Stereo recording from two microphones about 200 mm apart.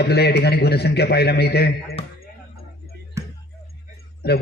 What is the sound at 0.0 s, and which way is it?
A man's voice, 55° left (ahead or behind).